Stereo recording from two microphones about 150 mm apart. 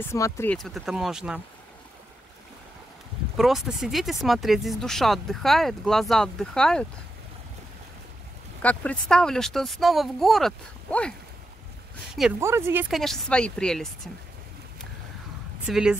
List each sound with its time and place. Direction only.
0.0 s speech: 15° left (ahead or behind)
0.6 s speech: centre (ahead or behind)
3.3 s speech: centre (ahead or behind)
8.6 s speech: 5° left (ahead or behind)
12.4 s speech: 15° right (ahead or behind)
12.9 s speech: centre (ahead or behind)
15.6 s speech: 5° right (ahead or behind)